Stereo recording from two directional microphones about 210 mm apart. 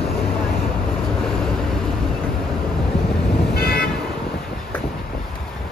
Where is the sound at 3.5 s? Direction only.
45° left (ahead or behind).